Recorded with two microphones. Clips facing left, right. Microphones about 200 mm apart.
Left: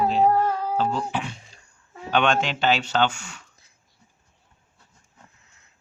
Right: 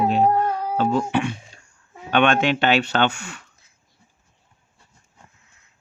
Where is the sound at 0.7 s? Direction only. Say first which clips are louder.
Right 4 dB; 60° right (ahead or behind).